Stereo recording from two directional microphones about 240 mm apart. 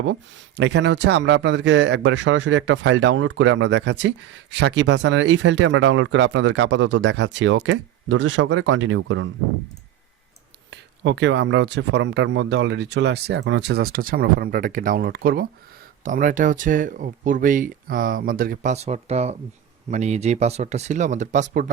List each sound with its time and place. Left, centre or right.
0.0 s speech: right
10.7 s speech: right